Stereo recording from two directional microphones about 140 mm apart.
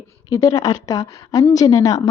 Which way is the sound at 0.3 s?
25° left (ahead or behind).